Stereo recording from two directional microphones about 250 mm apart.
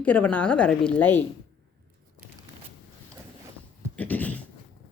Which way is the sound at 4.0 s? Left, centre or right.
Centre.